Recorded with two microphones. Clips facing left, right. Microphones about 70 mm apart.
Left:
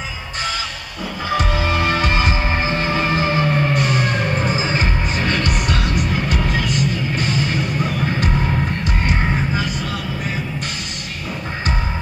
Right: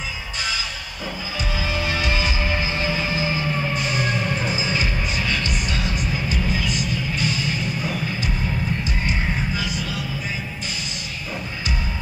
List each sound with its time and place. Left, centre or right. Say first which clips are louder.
1.3 s music: left 8 dB; left
9.0 s music: left 4 dB; left